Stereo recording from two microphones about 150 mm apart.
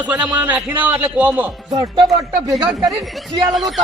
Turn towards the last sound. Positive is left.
turn(degrees=0)  # may be behind; listen again after turning